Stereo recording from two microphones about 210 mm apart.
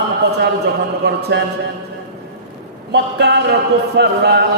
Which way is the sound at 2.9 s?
50° right (ahead or behind).